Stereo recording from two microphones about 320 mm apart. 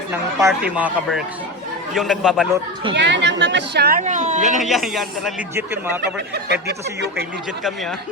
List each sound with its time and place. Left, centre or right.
0.1 s speech: centre
2.9 s a woman's voice: right
4.5 s speech: centre
6.1 s a woman's voice: right